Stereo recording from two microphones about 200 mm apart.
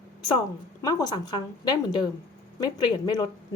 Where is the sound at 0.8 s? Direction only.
15° left (ahead or behind).